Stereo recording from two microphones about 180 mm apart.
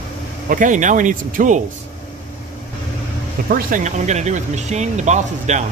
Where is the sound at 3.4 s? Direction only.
50° right (ahead or behind).